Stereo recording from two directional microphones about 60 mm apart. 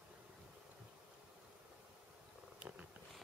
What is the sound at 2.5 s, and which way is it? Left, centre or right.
Purr, centre.